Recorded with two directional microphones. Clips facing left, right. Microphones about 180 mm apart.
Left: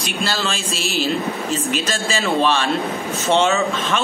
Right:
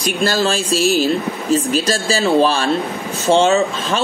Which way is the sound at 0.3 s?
40° right (ahead or behind).